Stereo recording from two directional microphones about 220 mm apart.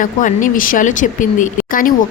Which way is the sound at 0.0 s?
35° left (ahead or behind).